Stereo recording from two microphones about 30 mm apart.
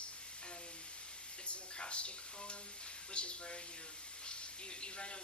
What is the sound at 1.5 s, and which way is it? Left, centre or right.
Speech, left.